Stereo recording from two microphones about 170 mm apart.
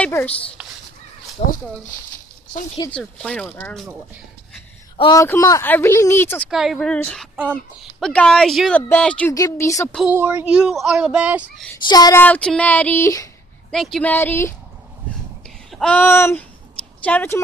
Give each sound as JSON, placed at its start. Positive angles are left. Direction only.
{"t": 0.0, "sound": "a sound", "side_deg": 10}
{"t": 1.4, "sound": "speech", "side_deg": 40}
{"t": 2.9, "sound": "speech", "side_deg": 5}
{"t": 4.9, "sound": "a man's voice", "side_deg": 30}
{"t": 5.2, "sound": "speech", "side_deg": 15}
{"t": 6.5, "sound": "speech", "side_deg": 0}
{"t": 9.3, "sound": "speech", "side_deg": 20}
{"t": 10.0, "sound": "speech", "side_deg": -10}
{"t": 11.8, "sound": "speech", "side_deg": 25}
{"t": 12.2, "sound": "speech", "side_deg": 10}
{"t": 13.7, "sound": "speech", "side_deg": 0}
{"t": 15.7, "sound": "speech", "side_deg": 5}